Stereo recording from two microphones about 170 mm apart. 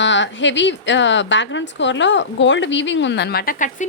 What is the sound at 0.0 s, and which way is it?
A woman's voice, 90° left.